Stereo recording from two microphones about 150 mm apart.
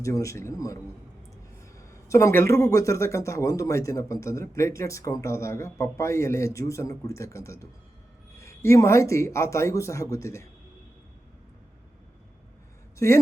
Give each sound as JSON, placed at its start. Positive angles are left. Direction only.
{"t": 0.0, "sound": "a man's voice", "side_deg": 20}